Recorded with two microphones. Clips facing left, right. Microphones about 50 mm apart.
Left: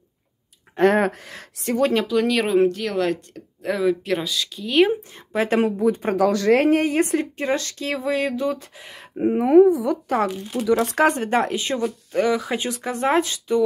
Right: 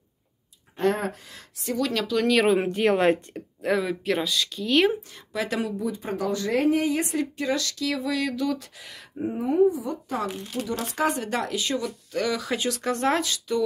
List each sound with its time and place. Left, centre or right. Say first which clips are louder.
0.7 s speech: left 7 dB; left
1.8 s speech: left 7 dB; left
2.0 s speech: even; centre
2.6 s a woman's voice: left 1 dB; right
3.6 s speech: left 3 dB; centre
5.1 s speech: left 7 dB; left
6.1 s speech: left 7 dB; left
9.2 s speech: left 8 dB; left
11.1 s speech: left 6 dB; left